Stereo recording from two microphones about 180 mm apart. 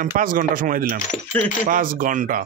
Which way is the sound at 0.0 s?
50° right (ahead or behind).